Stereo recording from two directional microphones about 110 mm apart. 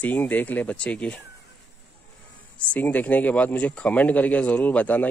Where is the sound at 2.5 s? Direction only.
10° left (ahead or behind).